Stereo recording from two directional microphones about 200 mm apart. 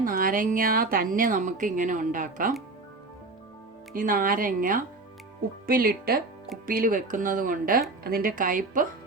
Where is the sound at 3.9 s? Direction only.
45° right (ahead or behind).